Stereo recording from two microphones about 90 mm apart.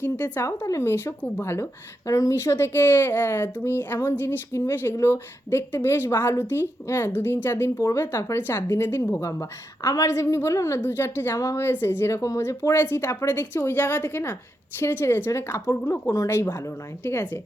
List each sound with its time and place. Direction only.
0.0 s a woman's voice: 20° left (ahead or behind)
0.4 s a woman's voice: 35° left (ahead or behind)